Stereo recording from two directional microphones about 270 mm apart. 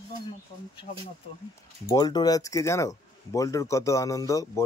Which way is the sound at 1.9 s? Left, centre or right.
Centre.